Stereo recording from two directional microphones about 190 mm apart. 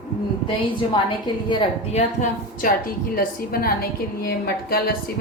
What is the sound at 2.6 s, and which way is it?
A woman's voice, 50° left (ahead or behind).